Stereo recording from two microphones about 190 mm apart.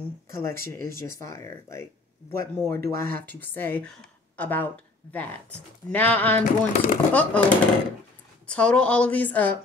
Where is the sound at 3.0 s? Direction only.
10° left (ahead or behind).